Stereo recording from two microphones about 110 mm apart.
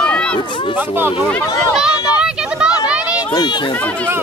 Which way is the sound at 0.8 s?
20° right (ahead or behind).